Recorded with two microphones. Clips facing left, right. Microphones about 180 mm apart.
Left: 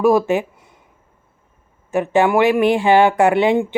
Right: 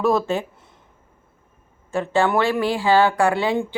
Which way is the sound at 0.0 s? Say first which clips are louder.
Left 5 dB; 15° left (ahead or behind).